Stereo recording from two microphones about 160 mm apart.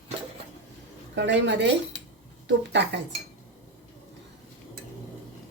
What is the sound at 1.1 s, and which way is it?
Speech, 90° right.